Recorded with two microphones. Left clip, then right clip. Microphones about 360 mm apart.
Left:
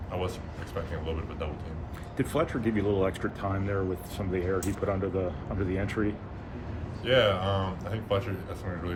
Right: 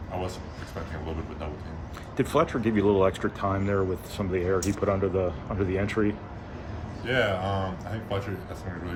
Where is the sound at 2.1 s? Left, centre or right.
Right.